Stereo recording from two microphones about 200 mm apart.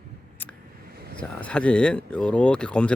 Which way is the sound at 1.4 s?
5° left (ahead or behind).